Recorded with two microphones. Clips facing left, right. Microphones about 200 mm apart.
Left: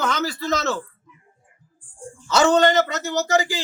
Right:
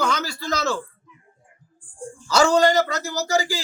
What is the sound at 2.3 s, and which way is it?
Speech, centre (ahead or behind).